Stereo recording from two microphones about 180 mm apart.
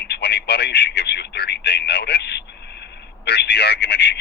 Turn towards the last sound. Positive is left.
turn(degrees=65)  # may be behind; listen again after turning